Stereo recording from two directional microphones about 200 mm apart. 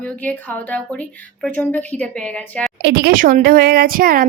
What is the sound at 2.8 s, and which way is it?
A woman's voice, 55° right (ahead or behind).